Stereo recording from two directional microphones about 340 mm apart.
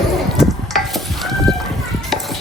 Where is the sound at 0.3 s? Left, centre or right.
Centre.